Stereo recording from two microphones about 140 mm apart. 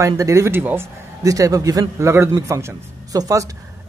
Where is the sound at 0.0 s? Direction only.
20° right (ahead or behind).